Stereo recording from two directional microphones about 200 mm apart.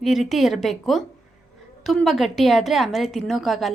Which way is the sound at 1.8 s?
Centre (ahead or behind).